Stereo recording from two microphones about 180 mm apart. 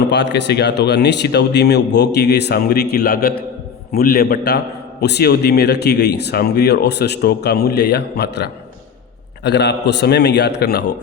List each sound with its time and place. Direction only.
0.1 s a man's voice: 75° left (ahead or behind)